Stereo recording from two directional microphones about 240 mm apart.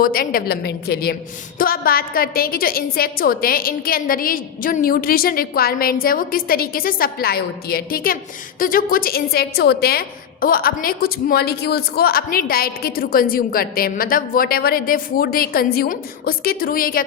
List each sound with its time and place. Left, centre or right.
0.0 s a woman's voice: left